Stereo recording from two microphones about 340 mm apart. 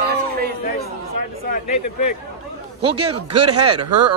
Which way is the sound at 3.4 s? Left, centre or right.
Right.